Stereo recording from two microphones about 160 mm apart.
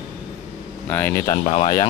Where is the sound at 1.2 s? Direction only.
40° left (ahead or behind).